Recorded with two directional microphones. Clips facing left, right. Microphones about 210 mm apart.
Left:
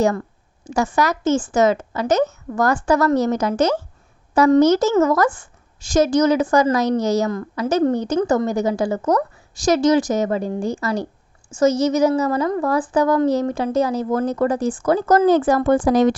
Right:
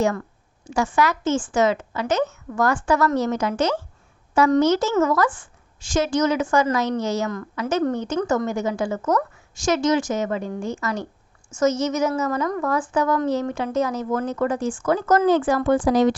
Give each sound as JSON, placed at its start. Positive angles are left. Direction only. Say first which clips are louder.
{"t": 0.0, "sound": "a woman's voice", "louder": "left 3 dB", "side_deg": 35}